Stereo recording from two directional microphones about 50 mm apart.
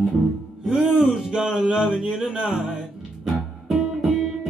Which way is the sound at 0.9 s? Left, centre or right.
Centre.